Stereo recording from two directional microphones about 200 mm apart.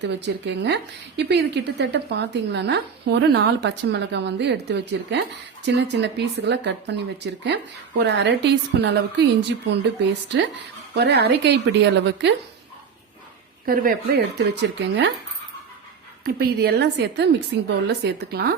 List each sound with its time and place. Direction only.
0.0 s speech: 60° right (ahead or behind)
13.7 s speech: 45° right (ahead or behind)
16.2 s a woman's voice: 50° right (ahead or behind)